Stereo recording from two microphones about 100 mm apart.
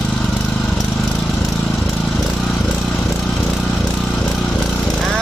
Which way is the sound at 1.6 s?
Centre (ahead or behind).